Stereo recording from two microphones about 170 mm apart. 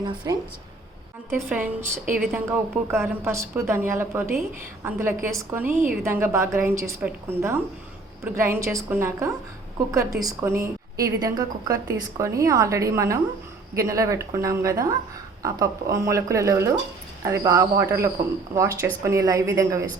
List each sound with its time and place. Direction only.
0.0 s a woman's voice: 25° right (ahead or behind)
1.3 s a woman's voice: 10° right (ahead or behind)